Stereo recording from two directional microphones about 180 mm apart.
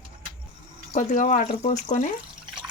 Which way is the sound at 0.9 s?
45° left (ahead or behind).